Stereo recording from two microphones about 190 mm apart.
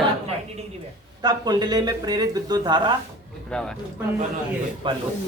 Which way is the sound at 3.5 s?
5° left (ahead or behind).